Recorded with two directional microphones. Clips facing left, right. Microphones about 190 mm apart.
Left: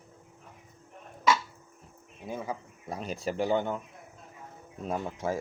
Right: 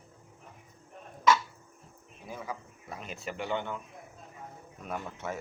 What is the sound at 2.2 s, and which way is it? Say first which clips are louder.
Speech: left 4 dB; 25° left (ahead or behind).